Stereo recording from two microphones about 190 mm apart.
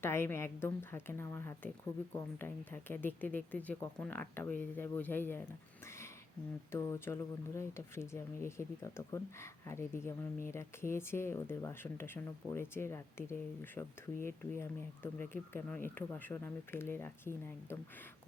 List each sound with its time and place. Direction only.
0.0 s speech: 10° left (ahead or behind)
6.7 s speech: 15° left (ahead or behind)